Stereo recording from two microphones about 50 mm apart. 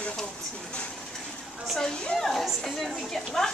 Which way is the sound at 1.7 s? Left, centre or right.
Centre.